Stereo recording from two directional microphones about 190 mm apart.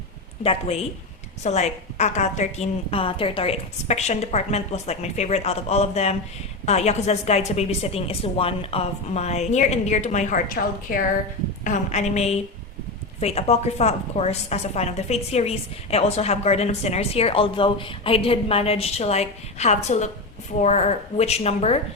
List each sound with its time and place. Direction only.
1.5 s a woman's voice: 35° left (ahead or behind)